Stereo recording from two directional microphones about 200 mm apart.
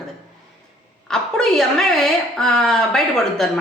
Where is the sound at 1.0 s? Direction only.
5° left (ahead or behind).